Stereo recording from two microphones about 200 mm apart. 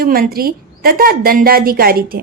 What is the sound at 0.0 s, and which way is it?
A woman's voice, 50° right (ahead or behind).